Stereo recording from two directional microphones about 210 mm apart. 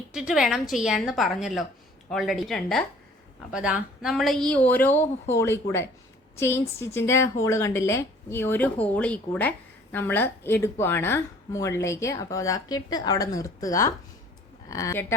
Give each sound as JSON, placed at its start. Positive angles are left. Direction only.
{"t": 0.1, "sound": "a woman's voice", "side_deg": -5}